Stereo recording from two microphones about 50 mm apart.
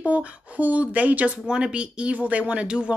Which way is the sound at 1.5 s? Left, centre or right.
Centre.